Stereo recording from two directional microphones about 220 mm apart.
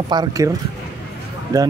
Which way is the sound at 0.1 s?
20° right (ahead or behind).